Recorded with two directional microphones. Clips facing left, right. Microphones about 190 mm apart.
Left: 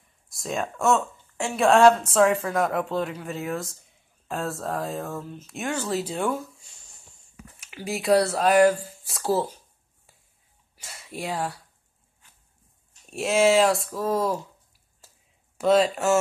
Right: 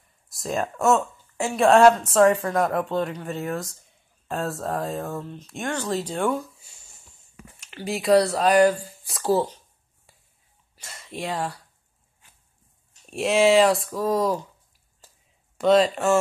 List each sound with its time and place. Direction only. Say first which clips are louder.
0.3 s speech: right 2 dB; centre (ahead or behind)
7.7 s speech: right 2 dB; 5° left (ahead or behind)
10.8 s speech: right 1 dB; 10° left (ahead or behind)
13.1 s speech: right 2 dB; centre (ahead or behind)
15.5 s speech: right 2 dB; 5° left (ahead or behind)